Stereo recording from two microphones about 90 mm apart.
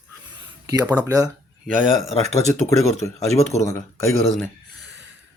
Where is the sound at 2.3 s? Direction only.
35° left (ahead or behind).